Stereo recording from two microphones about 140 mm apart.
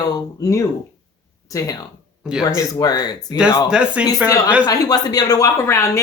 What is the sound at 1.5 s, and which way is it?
Speech, 25° left (ahead or behind).